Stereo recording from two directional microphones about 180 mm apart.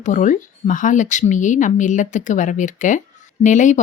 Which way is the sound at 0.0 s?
45° left (ahead or behind).